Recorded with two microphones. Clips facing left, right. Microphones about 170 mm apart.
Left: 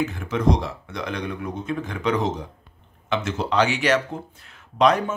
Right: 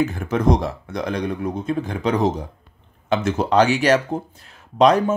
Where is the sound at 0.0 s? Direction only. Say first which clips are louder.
Right 3 dB; 45° right (ahead or behind).